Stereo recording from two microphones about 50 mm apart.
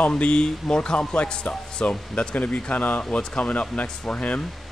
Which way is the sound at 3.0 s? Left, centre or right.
Left.